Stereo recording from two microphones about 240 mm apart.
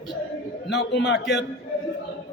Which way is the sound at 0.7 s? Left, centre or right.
Left.